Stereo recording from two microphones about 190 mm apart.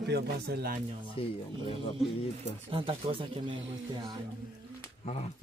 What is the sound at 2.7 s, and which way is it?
Speech, 25° right (ahead or behind).